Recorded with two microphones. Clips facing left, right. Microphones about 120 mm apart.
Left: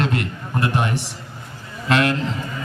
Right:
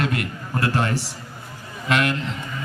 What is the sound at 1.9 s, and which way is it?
Speech, 30° left (ahead or behind).